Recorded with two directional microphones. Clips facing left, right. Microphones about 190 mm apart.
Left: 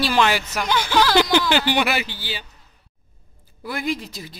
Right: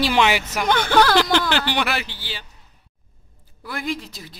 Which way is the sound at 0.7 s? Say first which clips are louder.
Right 3 dB; 55° right (ahead or behind).